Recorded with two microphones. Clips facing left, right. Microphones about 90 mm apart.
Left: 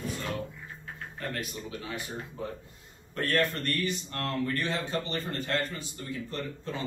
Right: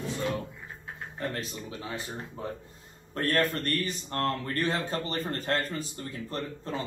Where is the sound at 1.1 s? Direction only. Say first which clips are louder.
Right 2 dB; 30° right (ahead or behind).